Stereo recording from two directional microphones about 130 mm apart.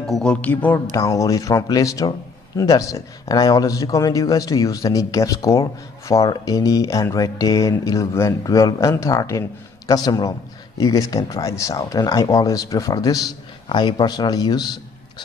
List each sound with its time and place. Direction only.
0.0 s speech: 5° left (ahead or behind)
0.9 s a man's voice: 25° left (ahead or behind)